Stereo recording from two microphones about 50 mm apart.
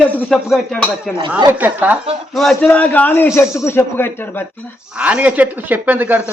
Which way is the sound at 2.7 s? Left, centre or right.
Left.